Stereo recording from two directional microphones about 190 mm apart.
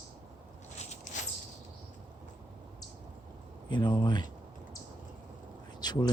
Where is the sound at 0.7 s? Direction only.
40° left (ahead or behind).